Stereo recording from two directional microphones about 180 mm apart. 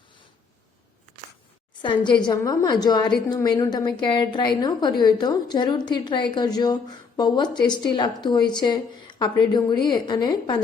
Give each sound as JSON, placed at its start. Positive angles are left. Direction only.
{"t": 2.2, "sound": "a woman's voice", "side_deg": 20}